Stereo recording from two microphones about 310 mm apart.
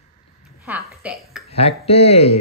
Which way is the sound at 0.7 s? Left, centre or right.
Centre.